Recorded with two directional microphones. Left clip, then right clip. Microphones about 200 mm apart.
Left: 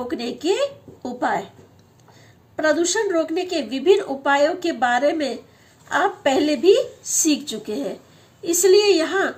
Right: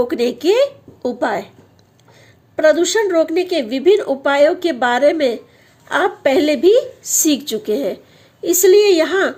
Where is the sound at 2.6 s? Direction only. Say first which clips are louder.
Right 6 dB; 45° right (ahead or behind).